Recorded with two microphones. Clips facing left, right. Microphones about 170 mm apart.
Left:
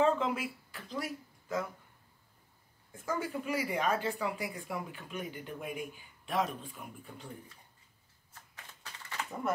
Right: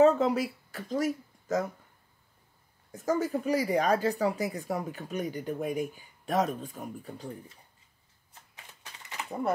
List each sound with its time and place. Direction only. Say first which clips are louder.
0.0 s speech: right 7 dB; 40° right (ahead or behind)
2.9 s speech: right 7 dB; 40° right (ahead or behind)